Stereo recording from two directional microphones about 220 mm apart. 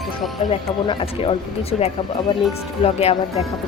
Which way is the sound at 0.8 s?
25° left (ahead or behind).